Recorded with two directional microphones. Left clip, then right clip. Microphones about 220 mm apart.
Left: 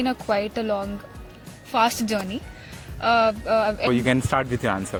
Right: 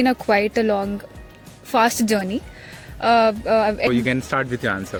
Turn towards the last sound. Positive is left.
turn(degrees=-5)  # may be behind; listen again after turning